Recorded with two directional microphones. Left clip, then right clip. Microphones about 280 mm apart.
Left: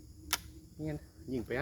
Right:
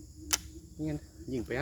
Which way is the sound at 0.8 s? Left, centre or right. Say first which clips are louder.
Right 4 dB; centre.